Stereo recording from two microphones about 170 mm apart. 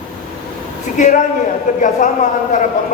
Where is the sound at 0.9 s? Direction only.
50° left (ahead or behind).